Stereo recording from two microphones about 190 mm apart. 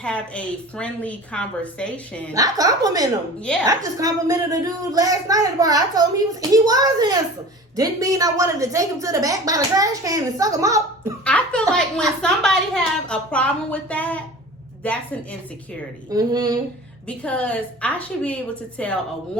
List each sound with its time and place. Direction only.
0.0 s a woman's voice: 5° left (ahead or behind)
2.3 s a woman's voice: 20° right (ahead or behind)
11.3 s a sound: 5° left (ahead or behind)
11.7 s a woman's voice: 5° left (ahead or behind)
16.0 s speech: 20° right (ahead or behind)
17.1 s a woman's voice: 5° left (ahead or behind)